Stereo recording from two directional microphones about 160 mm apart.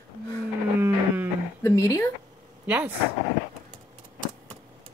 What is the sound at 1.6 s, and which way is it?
Speech, 15° left (ahead or behind).